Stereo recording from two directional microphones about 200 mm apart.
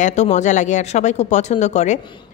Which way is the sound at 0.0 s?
35° left (ahead or behind).